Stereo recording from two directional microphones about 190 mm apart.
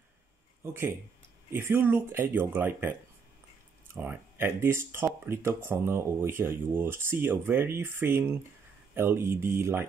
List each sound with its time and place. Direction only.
1.5 s speech: 10° right (ahead or behind)